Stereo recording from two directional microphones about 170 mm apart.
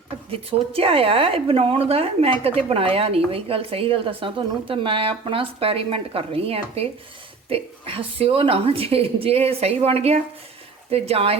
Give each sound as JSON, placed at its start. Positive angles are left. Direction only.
{"t": 0.3, "sound": "a woman's voice", "side_deg": -35}